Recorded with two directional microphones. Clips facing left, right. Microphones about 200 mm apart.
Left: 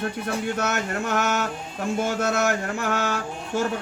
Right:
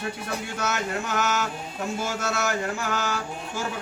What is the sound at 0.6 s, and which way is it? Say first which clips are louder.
A man's voice: left 2 dB; 55° left (ahead or behind).